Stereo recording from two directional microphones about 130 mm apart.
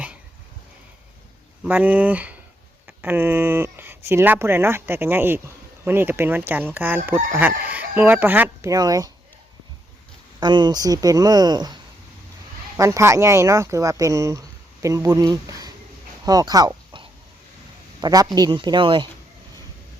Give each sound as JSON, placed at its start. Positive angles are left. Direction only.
{"t": 1.6, "sound": "speech", "side_deg": -10}
{"t": 8.7, "sound": "speech", "side_deg": -30}
{"t": 10.4, "sound": "speech", "side_deg": -35}
{"t": 12.7, "sound": "speech", "side_deg": -20}